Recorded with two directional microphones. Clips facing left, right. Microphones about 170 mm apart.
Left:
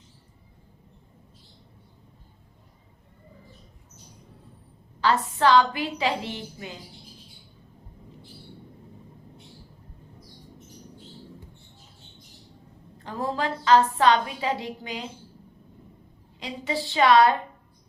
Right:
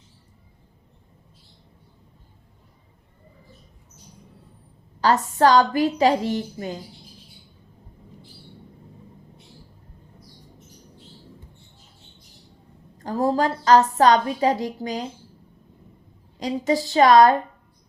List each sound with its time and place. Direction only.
4.9 s a woman's voice: 40° right (ahead or behind)
13.0 s a woman's voice: 40° right (ahead or behind)
16.4 s a woman's voice: 40° right (ahead or behind)